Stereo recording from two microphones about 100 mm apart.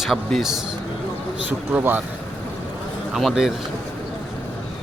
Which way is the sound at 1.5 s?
20° right (ahead or behind).